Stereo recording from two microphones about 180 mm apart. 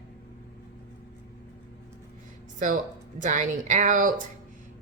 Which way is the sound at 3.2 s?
45° right (ahead or behind).